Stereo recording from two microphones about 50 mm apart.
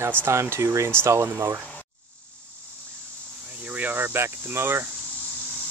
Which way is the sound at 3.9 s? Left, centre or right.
Right.